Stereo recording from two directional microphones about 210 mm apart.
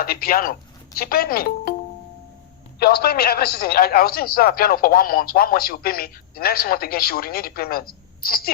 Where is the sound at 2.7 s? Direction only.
50° left (ahead or behind).